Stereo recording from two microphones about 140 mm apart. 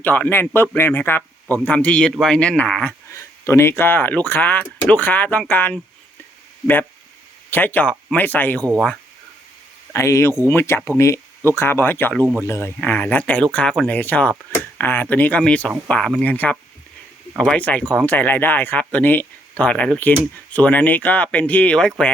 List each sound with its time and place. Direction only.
0.0 s speech: 15° left (ahead or behind)
3.1 s speech: 20° left (ahead or behind)
7.5 s speech: 10° left (ahead or behind)
9.9 s speech: 20° left (ahead or behind)